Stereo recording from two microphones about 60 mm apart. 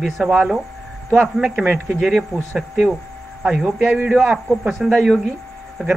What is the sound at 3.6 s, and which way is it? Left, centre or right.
Speech, right.